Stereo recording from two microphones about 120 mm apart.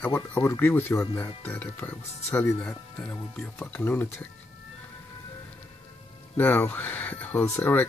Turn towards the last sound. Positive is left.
turn(degrees=20)  # may be behind; listen again after turning